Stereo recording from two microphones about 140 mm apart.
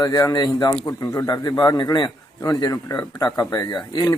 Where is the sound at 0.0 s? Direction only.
25° left (ahead or behind).